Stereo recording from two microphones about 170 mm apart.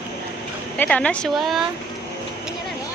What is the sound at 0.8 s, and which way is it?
Speech, 10° left (ahead or behind).